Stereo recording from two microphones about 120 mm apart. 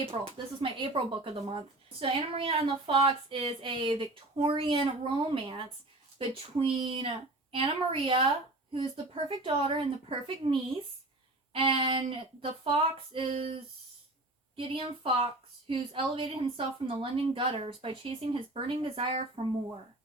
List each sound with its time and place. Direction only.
0.1 s speech: 45° right (ahead or behind)
14.5 s speech: 45° right (ahead or behind)